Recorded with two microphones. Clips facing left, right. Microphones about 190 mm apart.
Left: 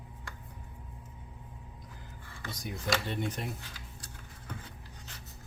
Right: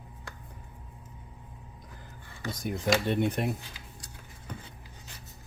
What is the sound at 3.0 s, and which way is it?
Speech, 60° right (ahead or behind).